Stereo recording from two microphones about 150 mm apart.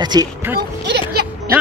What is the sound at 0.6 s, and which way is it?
Speech, 90° right.